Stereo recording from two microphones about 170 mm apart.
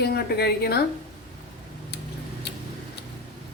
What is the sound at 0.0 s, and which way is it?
Speech, 75° left (ahead or behind).